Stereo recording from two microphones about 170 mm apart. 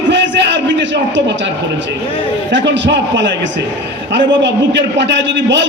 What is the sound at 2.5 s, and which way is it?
A man's voice, 90° right.